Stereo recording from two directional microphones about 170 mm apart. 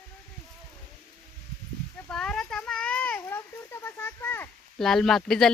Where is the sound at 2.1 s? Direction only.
5° left (ahead or behind).